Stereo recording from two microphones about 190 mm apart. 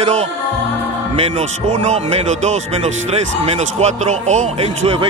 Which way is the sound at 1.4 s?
35° right (ahead or behind).